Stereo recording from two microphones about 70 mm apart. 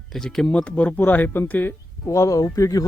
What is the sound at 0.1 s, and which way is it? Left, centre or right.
Speech, centre.